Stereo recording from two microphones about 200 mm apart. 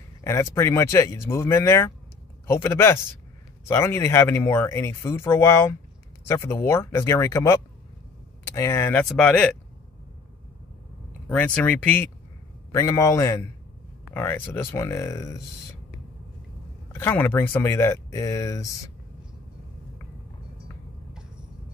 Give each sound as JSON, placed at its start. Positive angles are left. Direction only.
{"t": 0.2, "sound": "speech", "side_deg": 15}
{"t": 11.2, "sound": "speech", "side_deg": 5}
{"t": 16.9, "sound": "speech", "side_deg": 10}